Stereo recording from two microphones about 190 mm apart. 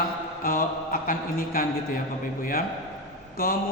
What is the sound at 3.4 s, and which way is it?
Speech, 50° left (ahead or behind).